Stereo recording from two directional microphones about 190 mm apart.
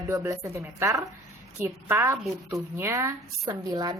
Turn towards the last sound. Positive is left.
turn(degrees=-20)  # may be behind; listen again after turning